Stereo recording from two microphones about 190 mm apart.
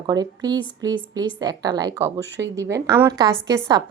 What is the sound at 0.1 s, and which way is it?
Speech, 20° right (ahead or behind).